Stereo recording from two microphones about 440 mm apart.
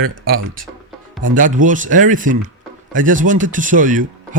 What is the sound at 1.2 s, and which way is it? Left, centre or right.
A man's voice, centre.